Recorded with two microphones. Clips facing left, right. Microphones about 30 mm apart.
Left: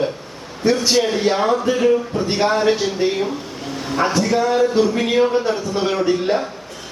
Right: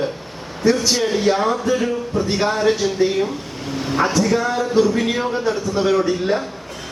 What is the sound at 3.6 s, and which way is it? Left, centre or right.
Speech, centre.